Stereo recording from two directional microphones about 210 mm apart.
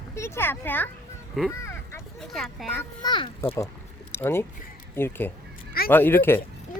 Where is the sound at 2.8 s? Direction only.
20° left (ahead or behind).